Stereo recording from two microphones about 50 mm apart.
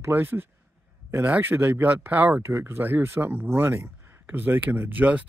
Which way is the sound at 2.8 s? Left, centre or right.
Right.